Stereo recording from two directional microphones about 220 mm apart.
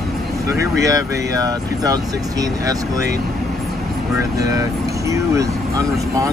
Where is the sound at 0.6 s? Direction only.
15° right (ahead or behind).